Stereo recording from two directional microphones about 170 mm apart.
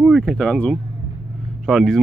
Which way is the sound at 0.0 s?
Centre (ahead or behind).